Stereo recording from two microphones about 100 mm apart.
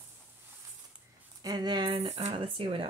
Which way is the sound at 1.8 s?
80° right.